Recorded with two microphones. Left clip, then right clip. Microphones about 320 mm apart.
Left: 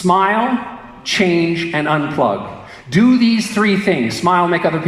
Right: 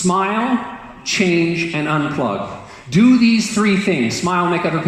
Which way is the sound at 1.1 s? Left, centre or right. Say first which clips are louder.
Left 2 dB; left.